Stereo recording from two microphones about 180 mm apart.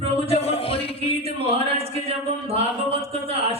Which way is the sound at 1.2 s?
35° right (ahead or behind).